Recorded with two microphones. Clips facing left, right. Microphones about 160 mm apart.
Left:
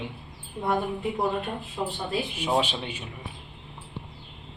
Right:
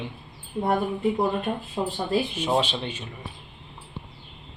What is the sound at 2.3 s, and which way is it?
Speech, 10° left (ahead or behind).